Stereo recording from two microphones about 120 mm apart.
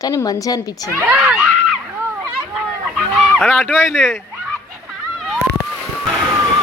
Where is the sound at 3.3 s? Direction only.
Centre (ahead or behind).